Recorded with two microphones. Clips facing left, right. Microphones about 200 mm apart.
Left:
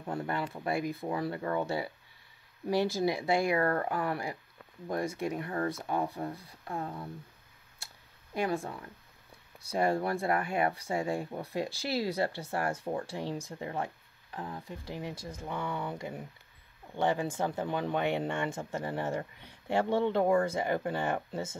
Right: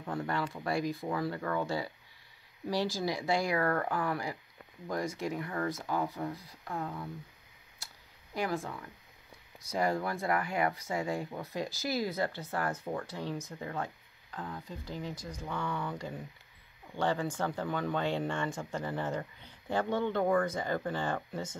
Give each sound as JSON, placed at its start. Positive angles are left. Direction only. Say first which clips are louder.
{"t": 0.1, "sound": "speech", "louder": "even", "side_deg": 25}
{"t": 2.9, "sound": "speech", "louder": "left 3 dB", "side_deg": 25}
{"t": 9.6, "sound": "speech", "louder": "left 2 dB", "side_deg": 30}